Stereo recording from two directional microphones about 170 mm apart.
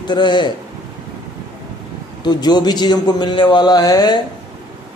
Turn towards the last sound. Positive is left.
turn(degrees=25)  # may be behind; listen again after turning